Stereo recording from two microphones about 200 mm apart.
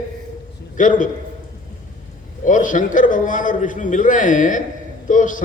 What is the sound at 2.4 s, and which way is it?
A man's voice, 40° left (ahead or behind).